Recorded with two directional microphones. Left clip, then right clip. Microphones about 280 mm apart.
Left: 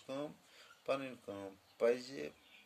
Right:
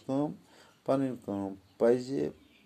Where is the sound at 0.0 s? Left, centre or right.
Centre.